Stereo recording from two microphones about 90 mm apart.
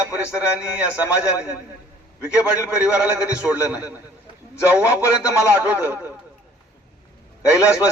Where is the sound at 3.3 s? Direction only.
15° right (ahead or behind).